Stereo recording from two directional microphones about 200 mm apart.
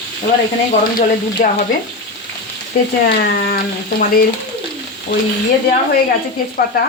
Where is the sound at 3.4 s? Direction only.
50° left (ahead or behind).